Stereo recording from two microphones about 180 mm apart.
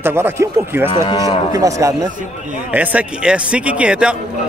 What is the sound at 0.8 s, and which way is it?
Speech, 25° left (ahead or behind).